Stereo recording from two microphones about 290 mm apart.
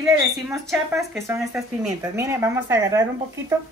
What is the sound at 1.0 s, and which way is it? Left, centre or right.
Speech, centre.